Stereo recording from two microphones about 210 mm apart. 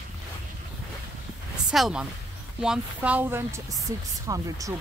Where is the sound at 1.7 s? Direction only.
5° right (ahead or behind).